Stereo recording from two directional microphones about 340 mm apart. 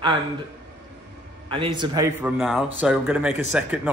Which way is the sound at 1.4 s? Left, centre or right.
Centre.